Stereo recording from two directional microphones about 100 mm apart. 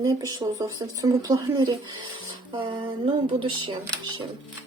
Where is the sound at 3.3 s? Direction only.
60° right (ahead or behind).